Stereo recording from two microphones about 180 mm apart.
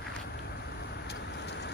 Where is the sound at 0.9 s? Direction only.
70° left (ahead or behind).